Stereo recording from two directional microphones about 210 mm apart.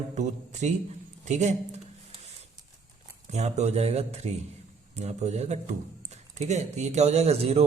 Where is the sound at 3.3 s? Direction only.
30° right (ahead or behind).